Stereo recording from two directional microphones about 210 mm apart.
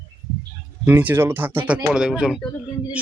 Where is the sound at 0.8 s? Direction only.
10° right (ahead or behind).